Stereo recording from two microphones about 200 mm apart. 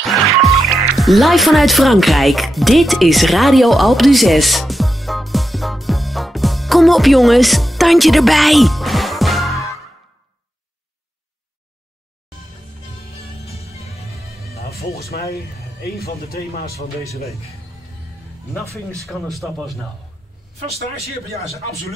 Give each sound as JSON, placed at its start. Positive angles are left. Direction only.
{"t": 0.0, "sound": "music", "side_deg": 0}
{"t": 13.7, "sound": "music", "side_deg": 30}
{"t": 14.5, "sound": "music", "side_deg": 50}
{"t": 15.0, "sound": "speech", "side_deg": 50}
{"t": 18.9, "sound": "speech", "side_deg": 0}
{"t": 20.7, "sound": "speech", "side_deg": -30}